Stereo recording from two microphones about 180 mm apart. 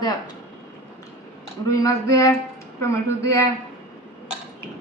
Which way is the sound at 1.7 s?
20° left (ahead or behind).